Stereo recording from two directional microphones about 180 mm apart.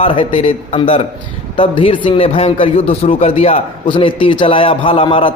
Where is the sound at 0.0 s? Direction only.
30° left (ahead or behind).